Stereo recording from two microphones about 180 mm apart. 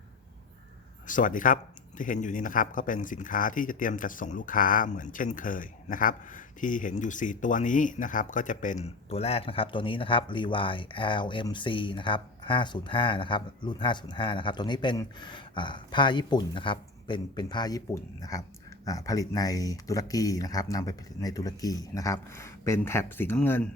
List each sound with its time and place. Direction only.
1.0 s speech: 45° left (ahead or behind); by 23.6 s 10° left (ahead or behind)